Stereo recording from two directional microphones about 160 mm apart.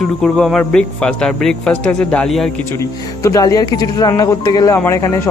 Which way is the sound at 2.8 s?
20° left (ahead or behind).